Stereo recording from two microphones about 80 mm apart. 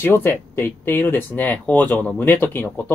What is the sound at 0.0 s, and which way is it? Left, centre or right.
Speech, left.